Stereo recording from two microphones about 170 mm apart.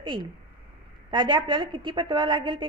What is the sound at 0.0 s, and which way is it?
A woman's voice, 25° right (ahead or behind).